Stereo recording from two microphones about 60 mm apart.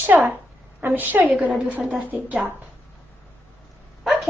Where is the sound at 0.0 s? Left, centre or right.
Right.